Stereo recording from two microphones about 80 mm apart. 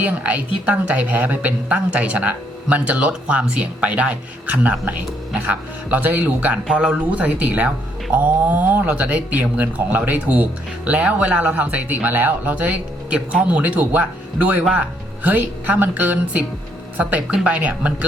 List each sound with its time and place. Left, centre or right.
0.0 s a woman's voice: centre